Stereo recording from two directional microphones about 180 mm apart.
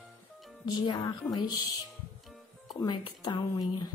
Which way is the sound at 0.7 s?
20° left (ahead or behind).